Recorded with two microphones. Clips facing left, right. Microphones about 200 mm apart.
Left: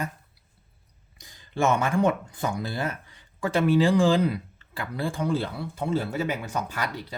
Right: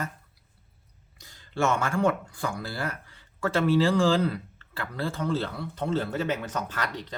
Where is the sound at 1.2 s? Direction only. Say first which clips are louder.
Left 2 dB; 15° left (ahead or behind).